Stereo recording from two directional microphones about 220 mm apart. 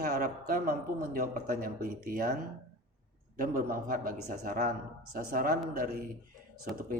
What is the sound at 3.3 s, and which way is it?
Speech, 40° right (ahead or behind).